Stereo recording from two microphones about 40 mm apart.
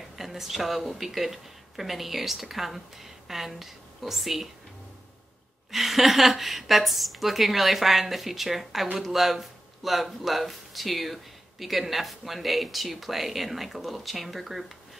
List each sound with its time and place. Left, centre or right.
0.1 s speech: centre
5.7 s a woman's voice: centre